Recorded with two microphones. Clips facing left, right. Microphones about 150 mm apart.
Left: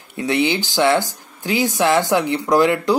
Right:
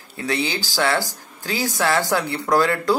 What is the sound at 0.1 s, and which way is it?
Speech, 20° left (ahead or behind).